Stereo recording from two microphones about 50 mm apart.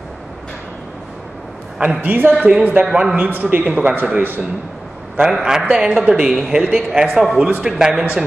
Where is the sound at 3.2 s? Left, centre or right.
Right.